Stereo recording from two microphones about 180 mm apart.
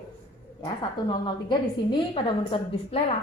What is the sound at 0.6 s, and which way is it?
A woman's voice, 25° left (ahead or behind).